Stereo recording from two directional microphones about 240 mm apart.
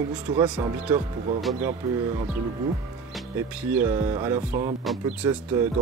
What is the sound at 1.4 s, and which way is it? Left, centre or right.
Speech, centre.